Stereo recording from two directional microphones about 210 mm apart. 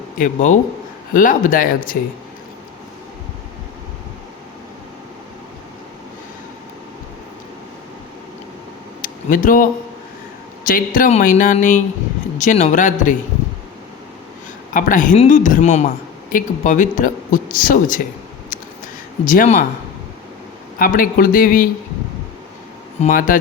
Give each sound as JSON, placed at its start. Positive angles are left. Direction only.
{"t": 0.2, "sound": "speech", "side_deg": 35}
{"t": 9.0, "sound": "a sound", "side_deg": 40}
{"t": 10.7, "sound": "speech", "side_deg": 40}
{"t": 14.7, "sound": "speech", "side_deg": 40}
{"t": 19.2, "sound": "speech", "side_deg": 40}
{"t": 20.7, "sound": "speech", "side_deg": 40}
{"t": 23.0, "sound": "speech", "side_deg": 40}